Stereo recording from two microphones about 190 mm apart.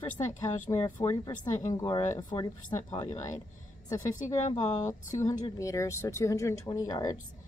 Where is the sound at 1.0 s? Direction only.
20° left (ahead or behind).